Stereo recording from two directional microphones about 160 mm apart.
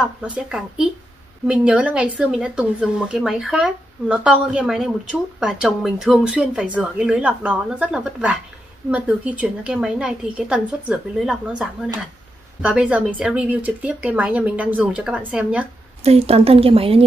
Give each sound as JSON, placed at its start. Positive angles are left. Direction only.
{"t": 0.0, "sound": "a woman's voice", "side_deg": -5}
{"t": 16.0, "sound": "a woman's voice", "side_deg": -40}